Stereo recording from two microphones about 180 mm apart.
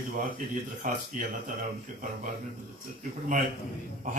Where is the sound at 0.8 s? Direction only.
45° right (ahead or behind).